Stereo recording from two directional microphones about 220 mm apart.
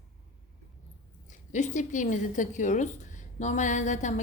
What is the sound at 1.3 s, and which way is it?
A woman's voice, 35° left (ahead or behind).